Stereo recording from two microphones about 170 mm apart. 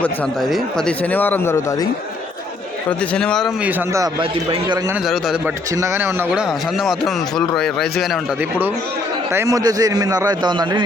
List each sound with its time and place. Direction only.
0.0 s speech: centre (ahead or behind)
3.1 s a man's voice: 5° left (ahead or behind)
3.6 s a man's voice: 10° right (ahead or behind)
5.0 s a man's voice: centre (ahead or behind)
5.7 s a man's voice: 15° right (ahead or behind)
6.7 s a man's voice: centre (ahead or behind)
9.3 s a man's voice: 15° right (ahead or behind)